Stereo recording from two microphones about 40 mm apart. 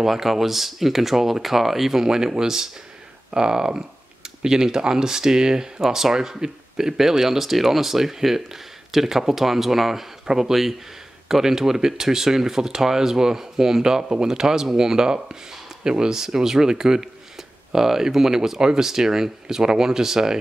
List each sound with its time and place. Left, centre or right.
0.0 s speech: centre
10.5 s speech: centre